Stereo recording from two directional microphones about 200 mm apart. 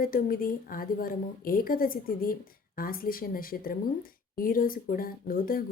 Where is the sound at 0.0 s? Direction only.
45° left (ahead or behind).